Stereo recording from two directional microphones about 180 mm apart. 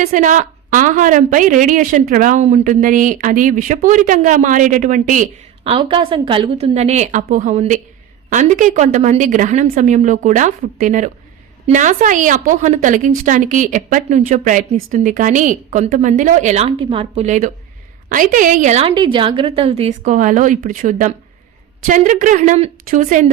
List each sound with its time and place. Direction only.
0.0 s a woman's voice: 45° right (ahead or behind)
5.7 s a woman's voice: 30° right (ahead or behind); by 23.2 s 45° right (ahead or behind)